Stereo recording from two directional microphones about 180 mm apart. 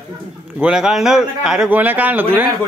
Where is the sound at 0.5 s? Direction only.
5° right (ahead or behind).